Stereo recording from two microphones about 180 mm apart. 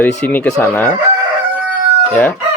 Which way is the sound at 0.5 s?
10° left (ahead or behind).